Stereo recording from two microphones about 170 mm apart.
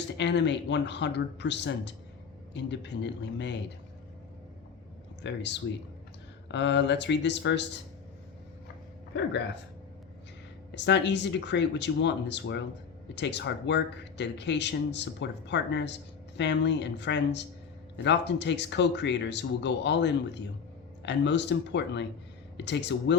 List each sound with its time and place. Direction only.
0.2 s speech: 90° left
5.2 s speech: 90° left
10.7 s speech: 90° left